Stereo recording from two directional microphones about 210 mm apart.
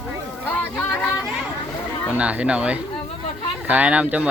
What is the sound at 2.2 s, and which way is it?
Speech, 5° right (ahead or behind).